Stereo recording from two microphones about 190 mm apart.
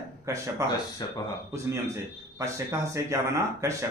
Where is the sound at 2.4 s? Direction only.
15° right (ahead or behind).